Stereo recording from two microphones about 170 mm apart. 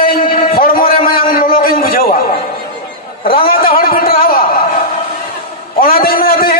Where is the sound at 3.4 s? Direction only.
60° left (ahead or behind).